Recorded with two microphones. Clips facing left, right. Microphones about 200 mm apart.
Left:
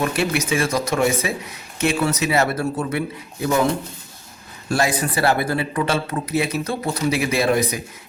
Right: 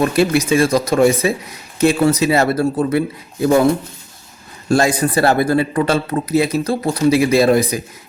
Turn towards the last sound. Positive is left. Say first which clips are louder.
# right 6 dB
turn(degrees=-35)  # may be behind; listen again after turning